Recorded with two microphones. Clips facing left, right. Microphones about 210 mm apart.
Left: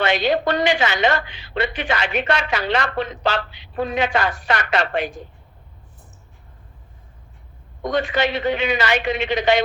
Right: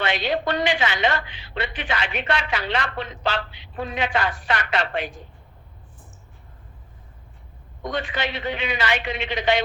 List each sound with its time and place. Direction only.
0.0 s a woman's voice: 45° left (ahead or behind)
7.9 s a woman's voice: 45° left (ahead or behind)